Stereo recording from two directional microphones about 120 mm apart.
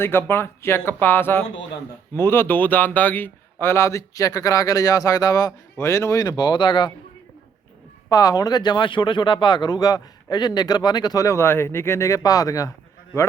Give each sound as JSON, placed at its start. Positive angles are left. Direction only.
{"t": 0.0, "sound": "speech", "side_deg": 20}
{"t": 8.1, "sound": "speech", "side_deg": 30}